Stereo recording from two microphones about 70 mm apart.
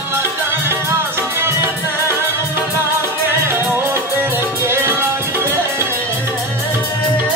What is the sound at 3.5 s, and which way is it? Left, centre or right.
Music, right.